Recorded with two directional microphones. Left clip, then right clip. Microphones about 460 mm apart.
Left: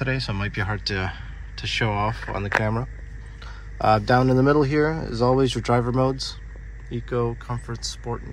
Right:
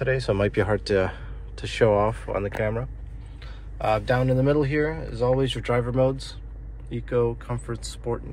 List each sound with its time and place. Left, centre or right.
0.0 s speech: centre